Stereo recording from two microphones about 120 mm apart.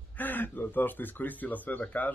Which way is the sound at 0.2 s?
15° left (ahead or behind).